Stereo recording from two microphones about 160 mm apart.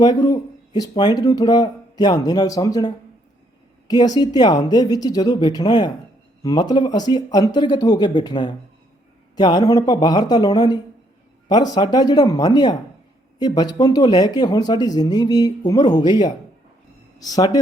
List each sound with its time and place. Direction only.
0.0 s speech: 25° left (ahead or behind)